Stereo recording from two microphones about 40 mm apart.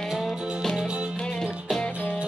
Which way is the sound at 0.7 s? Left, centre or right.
Right.